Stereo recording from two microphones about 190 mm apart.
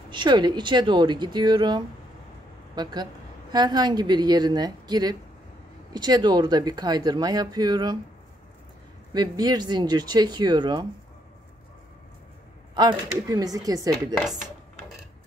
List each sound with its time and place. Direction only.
0.1 s speech: 25° right (ahead or behind)
9.1 s speech: 20° right (ahead or behind)
12.7 s speech: 20° right (ahead or behind)